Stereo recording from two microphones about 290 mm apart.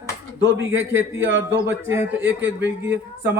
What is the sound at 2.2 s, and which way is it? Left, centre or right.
Speech, right.